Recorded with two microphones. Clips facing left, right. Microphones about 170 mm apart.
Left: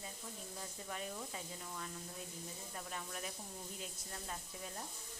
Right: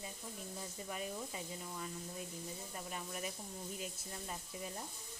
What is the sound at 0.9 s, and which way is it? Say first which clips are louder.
Speech: right 2 dB; 10° right (ahead or behind).